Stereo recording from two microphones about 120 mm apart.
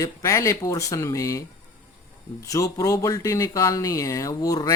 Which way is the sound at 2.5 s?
25° left (ahead or behind).